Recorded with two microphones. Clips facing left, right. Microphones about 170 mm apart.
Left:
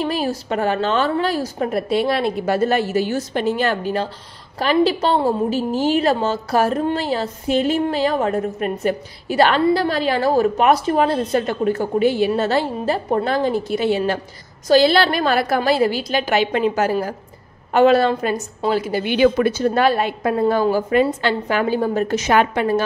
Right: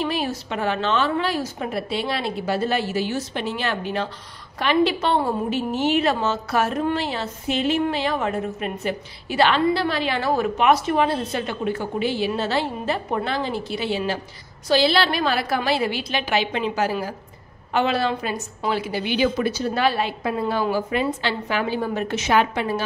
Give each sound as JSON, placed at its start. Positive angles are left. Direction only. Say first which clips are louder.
{"t": 0.0, "sound": "a woman's voice", "louder": "left 3 dB", "side_deg": 40}